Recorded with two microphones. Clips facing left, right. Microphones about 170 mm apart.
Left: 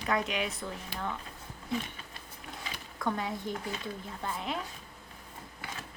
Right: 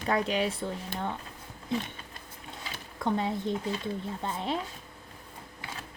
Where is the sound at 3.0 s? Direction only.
25° right (ahead or behind).